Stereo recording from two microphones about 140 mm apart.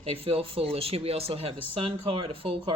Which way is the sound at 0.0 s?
45° right (ahead or behind).